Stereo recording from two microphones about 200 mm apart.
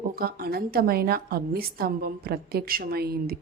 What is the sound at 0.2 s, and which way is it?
Speech, 50° right (ahead or behind).